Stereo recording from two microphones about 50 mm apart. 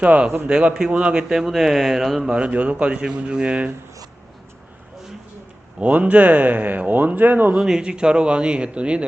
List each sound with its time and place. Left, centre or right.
0.0 s speech: right; by 2.2 s centre
2.2 s speech: right
5.8 s speech: right
7.5 s speech: centre